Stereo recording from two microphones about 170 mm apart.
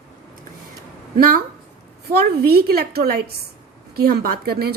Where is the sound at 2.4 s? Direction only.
65° right (ahead or behind).